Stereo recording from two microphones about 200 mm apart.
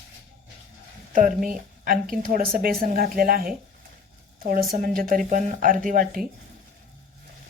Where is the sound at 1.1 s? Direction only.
40° right (ahead or behind).